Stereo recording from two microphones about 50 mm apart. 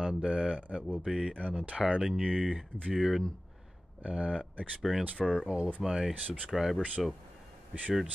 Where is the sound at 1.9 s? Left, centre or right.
Centre.